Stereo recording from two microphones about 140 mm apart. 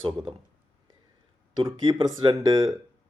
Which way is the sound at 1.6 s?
35° right (ahead or behind).